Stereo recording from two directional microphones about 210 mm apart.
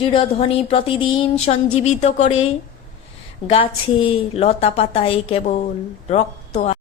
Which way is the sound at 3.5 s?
25° left (ahead or behind).